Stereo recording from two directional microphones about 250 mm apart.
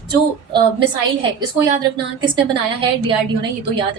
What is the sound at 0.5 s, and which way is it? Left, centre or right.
A woman's voice, centre.